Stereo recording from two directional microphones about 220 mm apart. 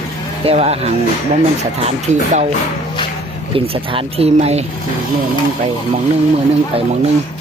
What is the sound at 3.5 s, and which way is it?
Speech, 25° right (ahead or behind).